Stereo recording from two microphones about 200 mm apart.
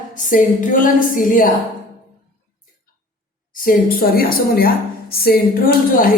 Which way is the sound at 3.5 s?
45° left (ahead or behind).